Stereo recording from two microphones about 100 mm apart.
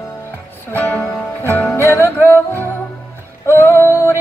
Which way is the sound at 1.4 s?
20° left (ahead or behind).